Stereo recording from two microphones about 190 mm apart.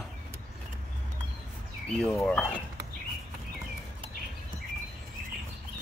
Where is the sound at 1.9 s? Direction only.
5° left (ahead or behind).